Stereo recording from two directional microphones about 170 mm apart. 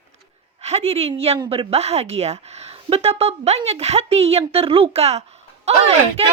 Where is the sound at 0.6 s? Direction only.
40° right (ahead or behind).